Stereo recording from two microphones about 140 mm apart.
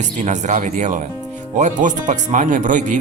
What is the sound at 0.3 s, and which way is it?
A man's voice, 65° right (ahead or behind).